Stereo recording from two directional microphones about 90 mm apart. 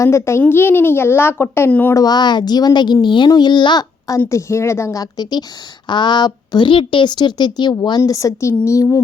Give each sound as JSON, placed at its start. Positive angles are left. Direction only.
{"t": 0.0, "sound": "speech", "side_deg": 30}
{"t": 1.9, "sound": "speech", "side_deg": 45}
{"t": 4.3, "sound": "a woman's voice", "side_deg": 35}